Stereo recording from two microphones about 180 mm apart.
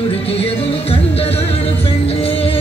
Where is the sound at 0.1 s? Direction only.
35° left (ahead or behind).